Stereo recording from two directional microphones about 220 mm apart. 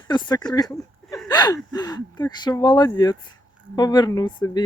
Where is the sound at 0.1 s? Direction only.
20° left (ahead or behind).